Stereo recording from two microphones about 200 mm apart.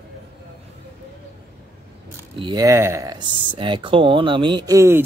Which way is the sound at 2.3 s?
20° right (ahead or behind).